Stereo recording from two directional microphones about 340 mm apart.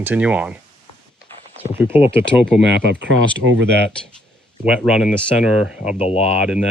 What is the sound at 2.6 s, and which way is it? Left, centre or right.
Speech, right.